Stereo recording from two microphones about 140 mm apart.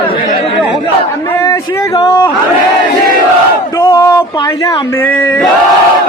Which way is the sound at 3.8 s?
25° left (ahead or behind).